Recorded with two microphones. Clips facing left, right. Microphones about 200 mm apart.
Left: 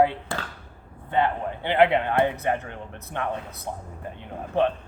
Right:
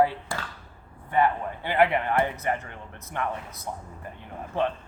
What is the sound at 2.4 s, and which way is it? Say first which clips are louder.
Speech: left 3 dB; 60° left (ahead or behind).